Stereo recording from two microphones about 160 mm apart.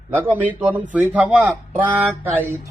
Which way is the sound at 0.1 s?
10° right (ahead or behind).